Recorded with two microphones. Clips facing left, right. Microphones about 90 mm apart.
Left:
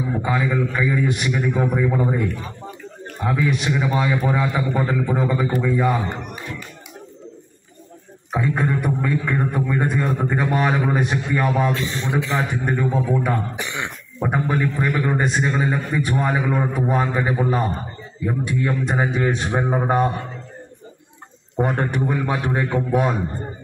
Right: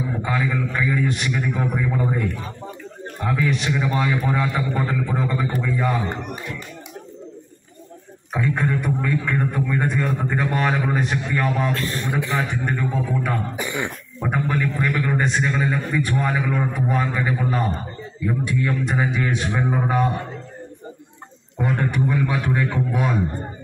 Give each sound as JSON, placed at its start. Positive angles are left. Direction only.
{"t": 0.2, "sound": "speech", "side_deg": 10}
{"t": 8.3, "sound": "speech", "side_deg": 20}
{"t": 13.6, "sound": "throat clearing", "side_deg": -10}
{"t": 14.2, "sound": "a man's voice", "side_deg": 20}
{"t": 21.5, "sound": "speech", "side_deg": 40}
{"t": 22.1, "sound": "a man's voice", "side_deg": 30}